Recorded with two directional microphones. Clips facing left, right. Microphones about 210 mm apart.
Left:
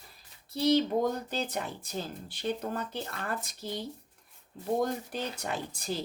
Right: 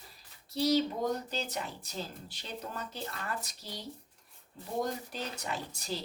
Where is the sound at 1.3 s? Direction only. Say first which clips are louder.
Left 3 dB; 50° left (ahead or behind).